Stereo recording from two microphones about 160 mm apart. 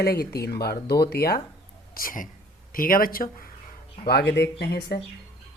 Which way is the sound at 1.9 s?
60° left (ahead or behind).